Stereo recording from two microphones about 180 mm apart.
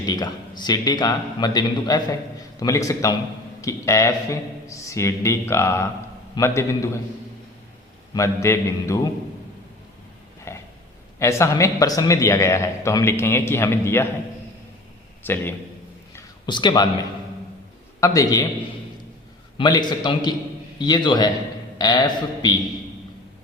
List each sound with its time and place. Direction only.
0.0 s a man's voice: 25° left (ahead or behind)
8.1 s a man's voice: 15° left (ahead or behind)
10.5 s a sound: 15° left (ahead or behind)
11.2 s a man's voice: 15° left (ahead or behind)
15.2 s a man's voice: 10° left (ahead or behind)
16.5 s a man's voice: 25° left (ahead or behind)
19.5 s a man's voice: 25° left (ahead or behind)